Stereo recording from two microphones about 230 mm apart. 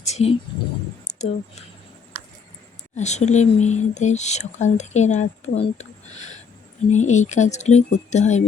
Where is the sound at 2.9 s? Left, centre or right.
Left.